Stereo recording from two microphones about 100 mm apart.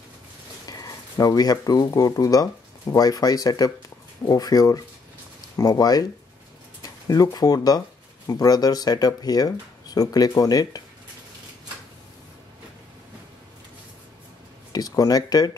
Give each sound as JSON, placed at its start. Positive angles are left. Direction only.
{"t": 0.7, "sound": "speech", "side_deg": 35}
{"t": 14.7, "sound": "speech", "side_deg": 35}